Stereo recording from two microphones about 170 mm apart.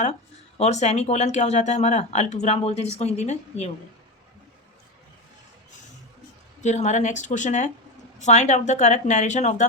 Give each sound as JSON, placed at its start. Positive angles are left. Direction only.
{"t": 0.0, "sound": "speech", "side_deg": 40}
{"t": 6.6, "sound": "speech", "side_deg": 45}